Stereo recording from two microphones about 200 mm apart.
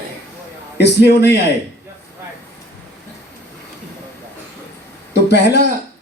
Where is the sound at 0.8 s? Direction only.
55° left (ahead or behind).